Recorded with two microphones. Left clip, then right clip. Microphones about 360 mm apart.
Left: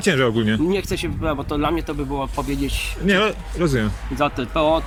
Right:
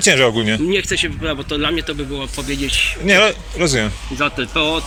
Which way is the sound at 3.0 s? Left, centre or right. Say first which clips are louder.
Right 5 dB; centre.